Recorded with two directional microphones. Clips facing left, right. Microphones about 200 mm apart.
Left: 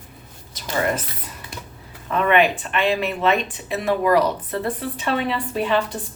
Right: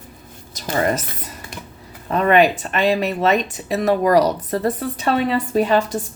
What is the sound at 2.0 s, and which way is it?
Speech, 40° right (ahead or behind).